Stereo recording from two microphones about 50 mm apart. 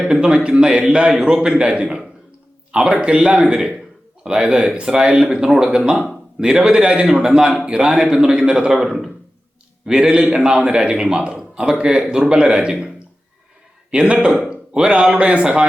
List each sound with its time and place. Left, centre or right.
0.0 s a man's voice: centre
13.9 s a man's voice: right